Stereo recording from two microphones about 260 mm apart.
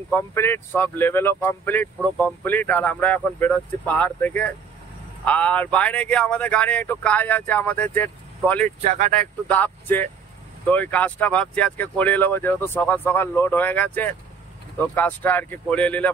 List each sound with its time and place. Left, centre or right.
0.1 s speech: centre
8.8 s speech: right
9.5 s speech: centre